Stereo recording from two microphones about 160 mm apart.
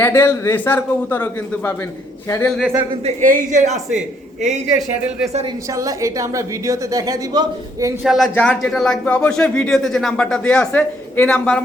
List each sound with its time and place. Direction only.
0.0 s a man's voice: 15° left (ahead or behind)
2.5 s speech: centre (ahead or behind)
3.2 s speech: 50° right (ahead or behind)
5.7 s a woman's voice: 20° right (ahead or behind)
8.0 s speech: centre (ahead or behind)